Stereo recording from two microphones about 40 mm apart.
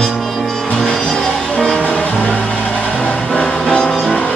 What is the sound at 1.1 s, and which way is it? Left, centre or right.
Music, left.